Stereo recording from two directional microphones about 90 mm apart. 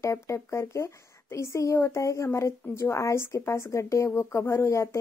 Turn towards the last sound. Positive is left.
turn(degrees=30)  # may be behind; listen again after turning